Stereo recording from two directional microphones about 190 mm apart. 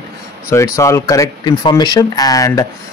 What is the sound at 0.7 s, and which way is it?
Speech, 15° left (ahead or behind).